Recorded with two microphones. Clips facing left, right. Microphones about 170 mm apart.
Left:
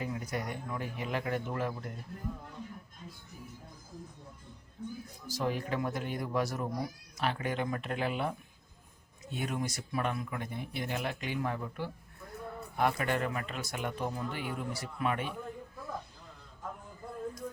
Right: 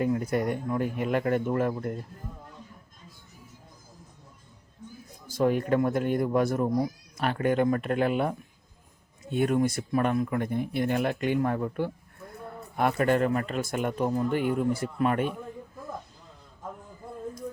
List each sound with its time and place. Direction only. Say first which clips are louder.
0.0 s speech: right 10 dB; 55° right (ahead or behind)
5.3 s speech: right 9 dB; 55° right (ahead or behind)